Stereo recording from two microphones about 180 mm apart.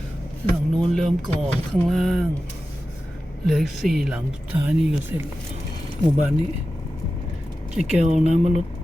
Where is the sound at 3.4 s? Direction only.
Centre (ahead or behind).